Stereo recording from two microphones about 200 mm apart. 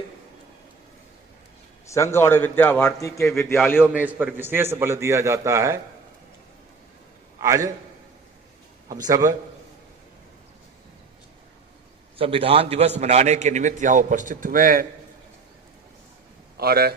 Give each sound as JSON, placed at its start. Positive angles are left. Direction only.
{"t": 1.9, "sound": "a man's voice", "side_deg": 15}
{"t": 7.3, "sound": "a man's voice", "side_deg": -15}
{"t": 9.0, "sound": "a man's voice", "side_deg": -15}
{"t": 12.1, "sound": "a man's voice", "side_deg": -30}
{"t": 16.6, "sound": "speech", "side_deg": -50}